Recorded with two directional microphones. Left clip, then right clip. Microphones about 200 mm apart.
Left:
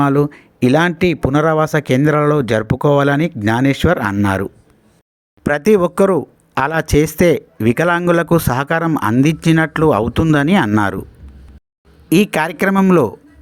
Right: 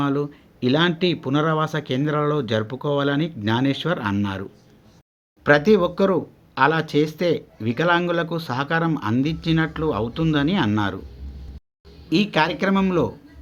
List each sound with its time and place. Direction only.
0.0 s speech: 40° left (ahead or behind)
5.5 s speech: 45° left (ahead or behind)
12.0 s speech: 45° left (ahead or behind)